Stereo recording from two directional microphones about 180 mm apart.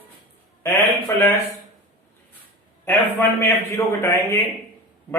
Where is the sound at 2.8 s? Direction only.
10° left (ahead or behind).